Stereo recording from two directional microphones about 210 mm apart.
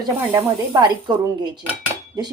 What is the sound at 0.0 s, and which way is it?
A woman's voice, 15° right (ahead or behind).